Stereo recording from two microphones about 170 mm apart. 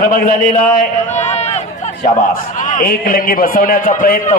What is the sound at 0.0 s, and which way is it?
A man's voice, 50° left (ahead or behind).